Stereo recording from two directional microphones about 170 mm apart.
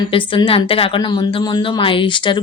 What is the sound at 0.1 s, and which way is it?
A woman's voice, 30° left (ahead or behind).